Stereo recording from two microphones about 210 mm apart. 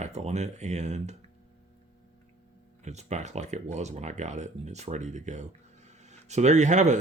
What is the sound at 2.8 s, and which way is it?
Speech, 35° right (ahead or behind).